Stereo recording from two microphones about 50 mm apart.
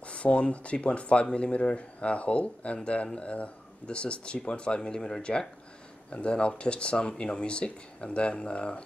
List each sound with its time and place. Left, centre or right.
0.0 s speech: left